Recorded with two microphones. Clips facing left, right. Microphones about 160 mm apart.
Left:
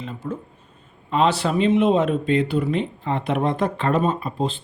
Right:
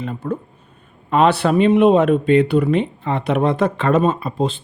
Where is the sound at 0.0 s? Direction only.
60° right (ahead or behind).